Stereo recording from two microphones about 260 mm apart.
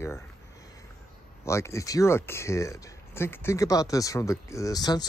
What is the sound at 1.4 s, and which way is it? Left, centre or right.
Speech, centre.